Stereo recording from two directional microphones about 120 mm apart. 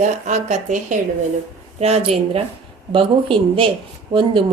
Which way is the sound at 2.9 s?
45° right (ahead or behind).